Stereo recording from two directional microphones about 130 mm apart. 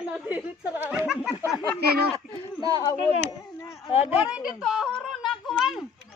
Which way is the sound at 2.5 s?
30° right (ahead or behind).